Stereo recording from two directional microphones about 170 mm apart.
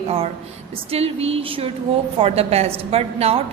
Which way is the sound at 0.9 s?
35° right (ahead or behind).